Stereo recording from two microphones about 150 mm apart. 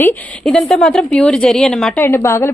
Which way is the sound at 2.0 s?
15° left (ahead or behind).